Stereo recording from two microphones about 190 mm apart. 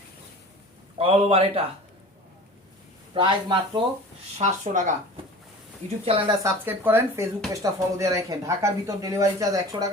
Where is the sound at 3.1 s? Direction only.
25° right (ahead or behind).